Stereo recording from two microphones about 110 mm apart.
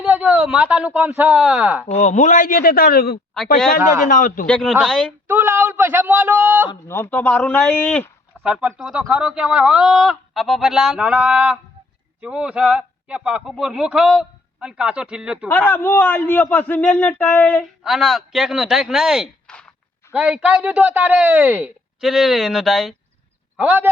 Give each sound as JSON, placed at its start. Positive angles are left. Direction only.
{"t": 0.0, "sound": "speech", "side_deg": -15}
{"t": 1.9, "sound": "a man's voice", "side_deg": 90}
{"t": 3.3, "sound": "a man's voice", "side_deg": 5}
{"t": 3.8, "sound": "speech", "side_deg": -25}
{"t": 4.4, "sound": "a man's voice", "side_deg": 5}
{"t": 5.3, "sound": "a man's voice", "side_deg": -15}
{"t": 6.8, "sound": "a man's voice", "side_deg": 20}
{"t": 8.4, "sound": "a man's voice", "side_deg": -5}
{"t": 15.4, "sound": "a man's voice", "side_deg": 20}
{"t": 17.8, "sound": "a man's voice", "side_deg": 0}
{"t": 22.0, "sound": "a man's voice", "side_deg": 0}
{"t": 23.6, "sound": "a man's voice", "side_deg": -15}